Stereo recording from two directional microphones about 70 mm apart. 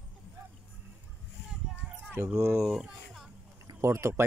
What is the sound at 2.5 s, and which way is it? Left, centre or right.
Speech, centre.